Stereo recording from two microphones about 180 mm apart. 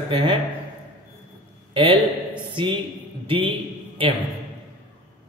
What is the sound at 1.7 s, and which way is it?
A man's voice, 30° right (ahead or behind).